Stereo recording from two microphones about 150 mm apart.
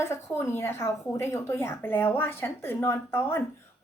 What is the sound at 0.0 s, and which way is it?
A woman's voice, 20° left (ahead or behind).